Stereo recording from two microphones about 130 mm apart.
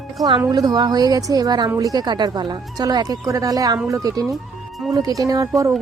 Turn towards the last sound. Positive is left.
turn(degrees=-25)  # may be behind; listen again after turning